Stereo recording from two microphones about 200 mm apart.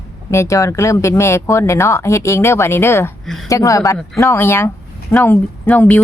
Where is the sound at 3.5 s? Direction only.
15° left (ahead or behind).